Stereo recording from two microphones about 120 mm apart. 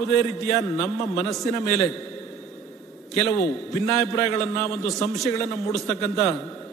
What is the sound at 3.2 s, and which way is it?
A man's voice, 5° left (ahead or behind).